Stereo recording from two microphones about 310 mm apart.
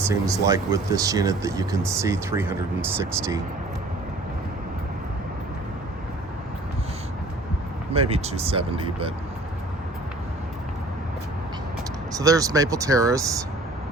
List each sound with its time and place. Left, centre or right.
0.0 s speech: centre
7.9 s speech: centre
12.1 s speech: centre